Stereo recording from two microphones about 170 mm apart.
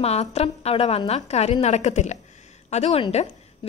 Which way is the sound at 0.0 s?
40° left (ahead or behind).